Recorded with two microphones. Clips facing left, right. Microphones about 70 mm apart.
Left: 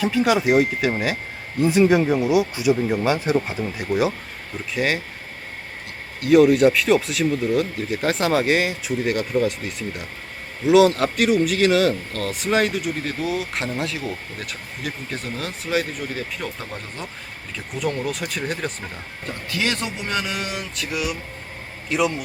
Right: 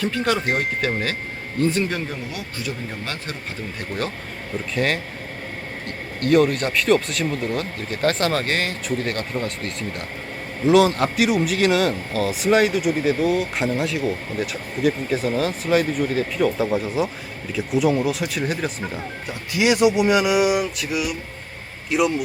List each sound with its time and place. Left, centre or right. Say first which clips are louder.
0.0 s speech: left 3 dB; centre
6.1 s speech: left 3 dB; centre